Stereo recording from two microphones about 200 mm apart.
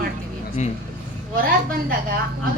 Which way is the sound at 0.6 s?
35° left (ahead or behind).